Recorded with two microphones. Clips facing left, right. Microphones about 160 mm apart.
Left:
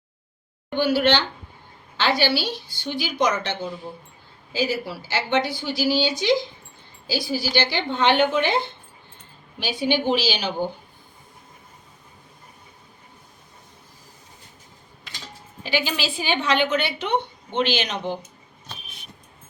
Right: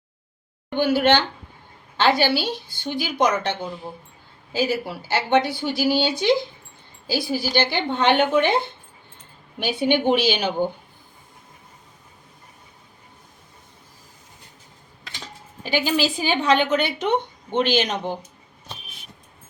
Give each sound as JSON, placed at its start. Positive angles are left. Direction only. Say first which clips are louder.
{"t": 0.8, "sound": "a woman's voice", "louder": "right 2 dB", "side_deg": -50}
{"t": 4.5, "sound": "a woman's voice", "louder": "right 2 dB", "side_deg": -55}
{"t": 9.6, "sound": "a woman's voice", "louder": "right 3 dB", "side_deg": -60}
{"t": 15.6, "sound": "a woman's voice", "louder": "right 4 dB", "side_deg": -45}